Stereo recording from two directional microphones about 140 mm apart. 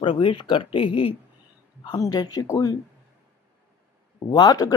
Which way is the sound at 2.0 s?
30° left (ahead or behind).